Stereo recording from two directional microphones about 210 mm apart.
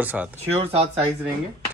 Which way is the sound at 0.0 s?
10° right (ahead or behind).